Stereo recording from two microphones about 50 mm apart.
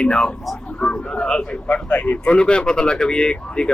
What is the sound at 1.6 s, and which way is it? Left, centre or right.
Speech, left.